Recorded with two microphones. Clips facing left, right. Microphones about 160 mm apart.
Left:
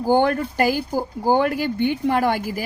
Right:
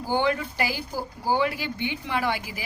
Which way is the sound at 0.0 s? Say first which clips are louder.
Left 7 dB; 50° left (ahead or behind).